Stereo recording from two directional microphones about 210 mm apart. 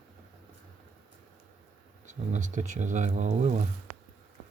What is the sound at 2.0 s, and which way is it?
Speech, 35° right (ahead or behind).